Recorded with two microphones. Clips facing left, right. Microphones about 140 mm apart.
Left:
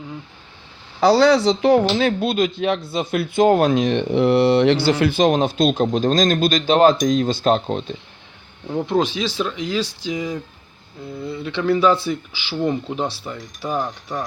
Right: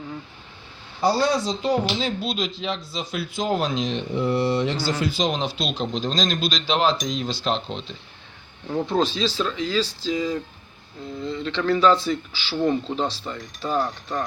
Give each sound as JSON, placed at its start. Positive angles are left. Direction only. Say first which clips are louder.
{"t": 1.0, "sound": "speech", "louder": "left 7 dB", "side_deg": 80}
{"t": 8.6, "sound": "speech", "louder": "left 2 dB", "side_deg": 5}